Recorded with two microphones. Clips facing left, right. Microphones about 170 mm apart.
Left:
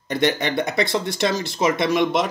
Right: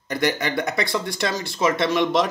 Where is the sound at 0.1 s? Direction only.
25° left (ahead or behind).